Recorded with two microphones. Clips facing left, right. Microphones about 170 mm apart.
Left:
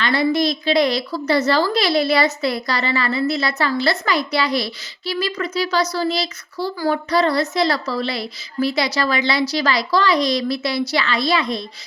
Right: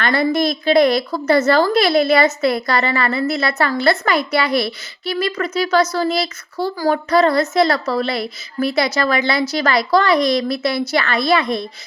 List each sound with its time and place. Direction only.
0.0 s a woman's voice: 50° right (ahead or behind)